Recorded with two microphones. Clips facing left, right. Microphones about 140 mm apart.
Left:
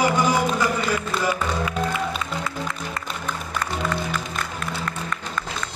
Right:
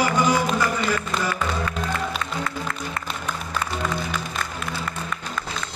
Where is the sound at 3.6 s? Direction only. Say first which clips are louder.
Left 2 dB; 10° right (ahead or behind).